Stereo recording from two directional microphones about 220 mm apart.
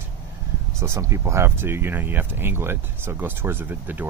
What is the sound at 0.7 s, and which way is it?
Speech, 15° right (ahead or behind).